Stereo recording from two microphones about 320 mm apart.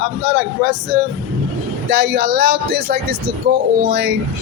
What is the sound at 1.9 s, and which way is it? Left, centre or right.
Speech, right.